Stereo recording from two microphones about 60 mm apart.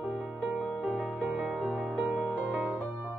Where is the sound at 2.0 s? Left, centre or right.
Right.